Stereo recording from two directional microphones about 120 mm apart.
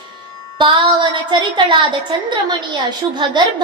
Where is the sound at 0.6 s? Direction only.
45° right (ahead or behind).